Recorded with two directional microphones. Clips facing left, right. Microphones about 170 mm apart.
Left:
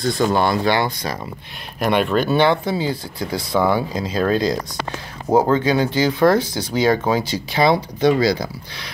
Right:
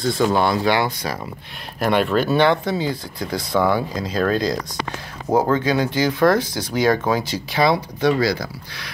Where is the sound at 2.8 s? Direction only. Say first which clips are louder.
Left 1 dB; 25° left (ahead or behind).